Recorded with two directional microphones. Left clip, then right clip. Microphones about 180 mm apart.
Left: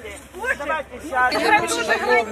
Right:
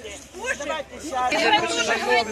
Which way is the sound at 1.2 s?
25° right (ahead or behind).